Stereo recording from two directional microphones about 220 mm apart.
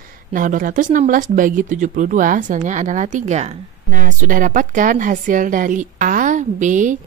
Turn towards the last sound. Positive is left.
turn(degrees=-35)  # may be behind; listen again after turning